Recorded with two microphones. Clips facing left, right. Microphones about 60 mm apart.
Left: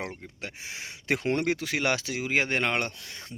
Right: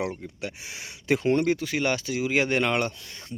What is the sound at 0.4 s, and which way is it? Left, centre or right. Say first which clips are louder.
Speech: right 2 dB; left.